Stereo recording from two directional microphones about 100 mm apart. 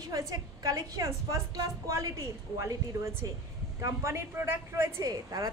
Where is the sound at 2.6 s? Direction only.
25° right (ahead or behind).